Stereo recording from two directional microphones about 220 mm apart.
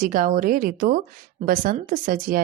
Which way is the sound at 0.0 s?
40° right (ahead or behind).